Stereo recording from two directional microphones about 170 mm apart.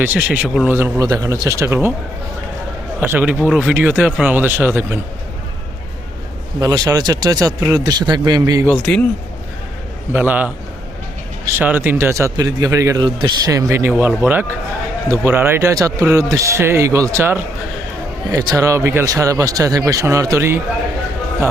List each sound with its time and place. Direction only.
0.0 s a man's voice: 10° right (ahead or behind)
0.7 s a man's voice: 15° right (ahead or behind)
3.0 s a man's voice: 10° right (ahead or behind)
6.6 s speech: 20° right (ahead or behind)
8.8 s speech: 5° left (ahead or behind)
10.1 s a man's voice: 10° right (ahead or behind)